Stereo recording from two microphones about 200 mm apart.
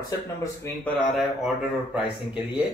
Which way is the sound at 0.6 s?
10° left (ahead or behind).